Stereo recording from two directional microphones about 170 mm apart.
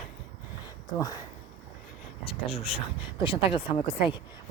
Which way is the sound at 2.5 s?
35° left (ahead or behind).